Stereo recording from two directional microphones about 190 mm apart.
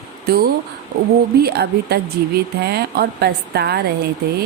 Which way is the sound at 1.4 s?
55° right (ahead or behind).